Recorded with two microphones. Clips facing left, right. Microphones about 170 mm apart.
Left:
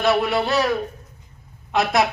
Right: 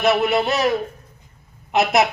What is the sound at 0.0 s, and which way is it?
Speech, 20° right (ahead or behind).